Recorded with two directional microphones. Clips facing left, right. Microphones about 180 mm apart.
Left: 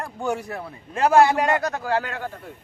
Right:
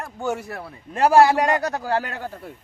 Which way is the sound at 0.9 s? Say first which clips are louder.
Right 2 dB; 35° right (ahead or behind).